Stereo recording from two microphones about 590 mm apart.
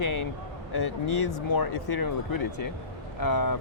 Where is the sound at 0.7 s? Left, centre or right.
Left.